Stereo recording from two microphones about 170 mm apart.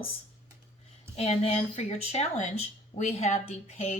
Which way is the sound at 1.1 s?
40° left (ahead or behind).